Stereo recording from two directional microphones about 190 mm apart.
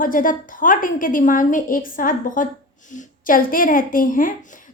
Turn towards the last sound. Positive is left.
turn(degrees=45)  # may be behind; listen again after turning